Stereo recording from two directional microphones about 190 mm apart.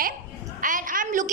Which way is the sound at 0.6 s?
45° right (ahead or behind).